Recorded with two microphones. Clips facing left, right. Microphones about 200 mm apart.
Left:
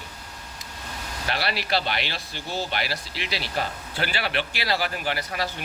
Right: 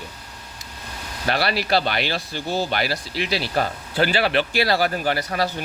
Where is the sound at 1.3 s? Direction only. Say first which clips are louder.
Right 6 dB; 40° right (ahead or behind).